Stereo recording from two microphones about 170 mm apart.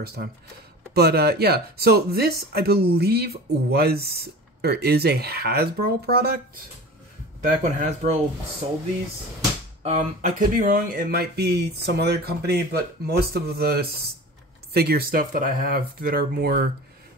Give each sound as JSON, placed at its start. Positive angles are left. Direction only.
{"t": 0.0, "sound": "speech", "side_deg": -65}
{"t": 7.4, "sound": "speech", "side_deg": -45}
{"t": 9.8, "sound": "speech", "side_deg": -45}